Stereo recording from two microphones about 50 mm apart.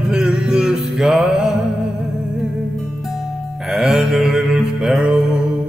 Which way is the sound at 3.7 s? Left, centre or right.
Centre.